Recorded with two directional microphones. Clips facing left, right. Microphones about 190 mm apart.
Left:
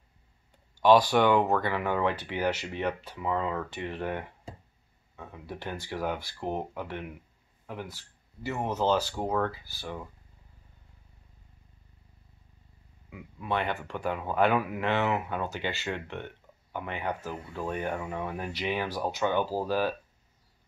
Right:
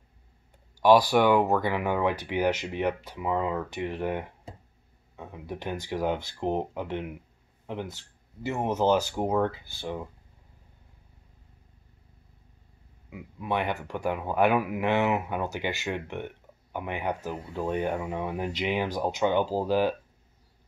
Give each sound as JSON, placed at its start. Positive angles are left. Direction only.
{"t": 0.7, "sound": "speech", "side_deg": -10}
{"t": 13.1, "sound": "speech", "side_deg": -15}